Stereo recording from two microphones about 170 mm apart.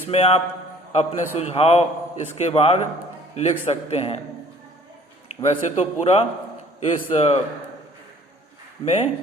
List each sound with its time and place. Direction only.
0.1 s a man's voice: 35° left (ahead or behind)
5.4 s a man's voice: 40° left (ahead or behind)
8.8 s a man's voice: 40° left (ahead or behind)